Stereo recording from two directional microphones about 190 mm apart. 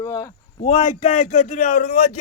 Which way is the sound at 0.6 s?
35° left (ahead or behind).